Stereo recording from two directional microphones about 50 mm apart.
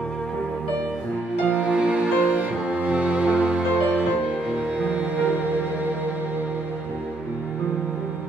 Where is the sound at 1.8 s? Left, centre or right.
Right.